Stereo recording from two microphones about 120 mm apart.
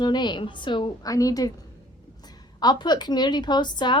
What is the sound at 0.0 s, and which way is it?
A woman's voice, 35° left (ahead or behind).